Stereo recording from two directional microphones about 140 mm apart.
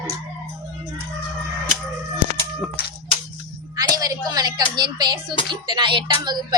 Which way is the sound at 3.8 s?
25° right (ahead or behind).